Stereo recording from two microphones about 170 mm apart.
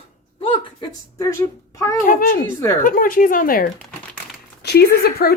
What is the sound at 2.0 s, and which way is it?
Speech, 55° left (ahead or behind).